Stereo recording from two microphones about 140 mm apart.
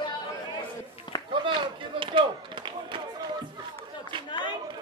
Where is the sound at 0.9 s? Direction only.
35° left (ahead or behind).